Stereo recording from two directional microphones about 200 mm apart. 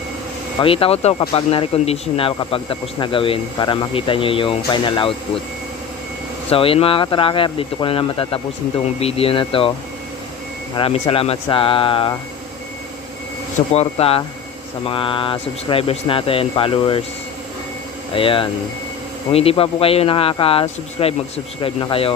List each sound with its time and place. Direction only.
0.6 s speech: 25° left (ahead or behind)
6.5 s speech: 30° left (ahead or behind)
10.8 s speech: 30° left (ahead or behind)
13.7 s speech: 30° left (ahead or behind)
18.1 s speech: 25° left (ahead or behind)